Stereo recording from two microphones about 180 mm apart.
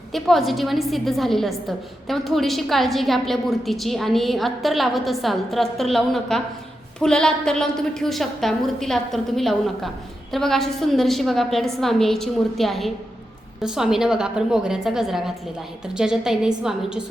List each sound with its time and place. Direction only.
0.1 s a woman's voice: centre (ahead or behind)